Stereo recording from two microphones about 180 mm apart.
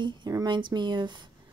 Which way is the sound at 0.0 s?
20° right (ahead or behind).